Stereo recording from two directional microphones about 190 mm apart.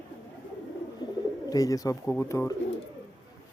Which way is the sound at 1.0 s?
20° left (ahead or behind).